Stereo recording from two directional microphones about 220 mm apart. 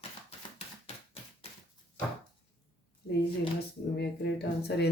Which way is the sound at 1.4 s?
25° left (ahead or behind).